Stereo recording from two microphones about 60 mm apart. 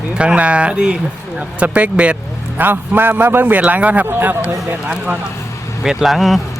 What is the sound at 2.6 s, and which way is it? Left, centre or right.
A man's voice, right.